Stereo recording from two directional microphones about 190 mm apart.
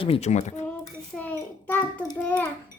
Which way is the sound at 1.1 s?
10° left (ahead or behind).